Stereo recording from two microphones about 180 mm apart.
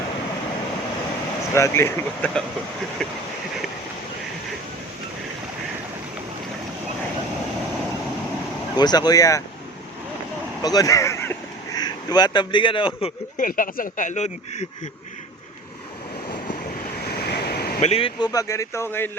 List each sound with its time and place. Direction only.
1.5 s speech: 15° left (ahead or behind)
3.0 s a sound: 5° left (ahead or behind)
8.7 s speech: 20° left (ahead or behind)
10.6 s speech: 20° left (ahead or behind)
13.3 s speech: 50° left (ahead or behind)
17.2 s waves: 60° left (ahead or behind)
17.7 s speech: 30° left (ahead or behind); by 19.1 s 10° left (ahead or behind)